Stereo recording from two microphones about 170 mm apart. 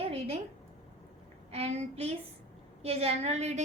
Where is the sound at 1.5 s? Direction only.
40° right (ahead or behind).